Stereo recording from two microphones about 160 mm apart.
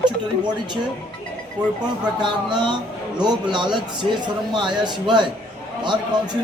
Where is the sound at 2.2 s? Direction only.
30° right (ahead or behind).